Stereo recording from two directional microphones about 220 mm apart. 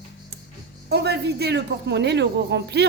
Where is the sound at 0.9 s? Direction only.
45° right (ahead or behind).